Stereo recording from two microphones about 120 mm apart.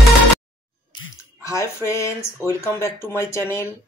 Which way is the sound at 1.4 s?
25° left (ahead or behind).